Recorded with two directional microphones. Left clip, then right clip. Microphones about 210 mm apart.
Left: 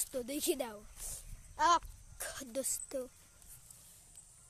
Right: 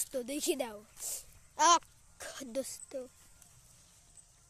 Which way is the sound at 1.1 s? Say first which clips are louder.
Right 6 dB; 25° right (ahead or behind).